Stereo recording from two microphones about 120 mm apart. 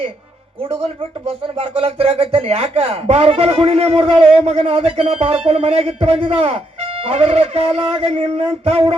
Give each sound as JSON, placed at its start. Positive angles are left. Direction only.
{"t": 1.5, "sound": "speech", "side_deg": -55}